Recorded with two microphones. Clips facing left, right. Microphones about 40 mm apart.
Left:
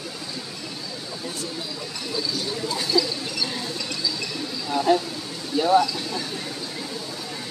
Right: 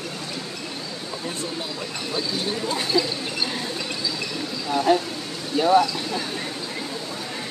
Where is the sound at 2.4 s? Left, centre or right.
Right.